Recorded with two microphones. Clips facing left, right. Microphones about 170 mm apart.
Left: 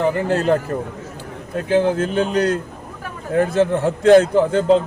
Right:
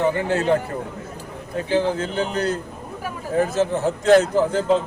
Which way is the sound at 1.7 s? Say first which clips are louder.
Left 4 dB; 55° left (ahead or behind).